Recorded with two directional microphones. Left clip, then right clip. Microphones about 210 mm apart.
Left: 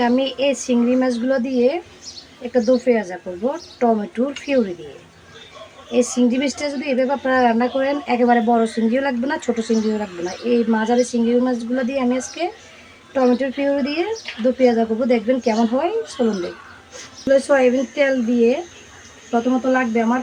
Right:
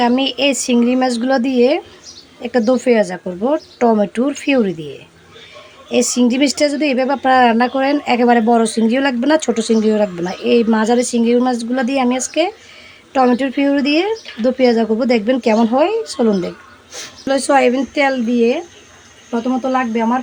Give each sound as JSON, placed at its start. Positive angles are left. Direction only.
{"t": 0.0, "sound": "speech", "side_deg": -50}
{"t": 5.9, "sound": "speech", "side_deg": -50}
{"t": 19.7, "sound": "speech", "side_deg": -40}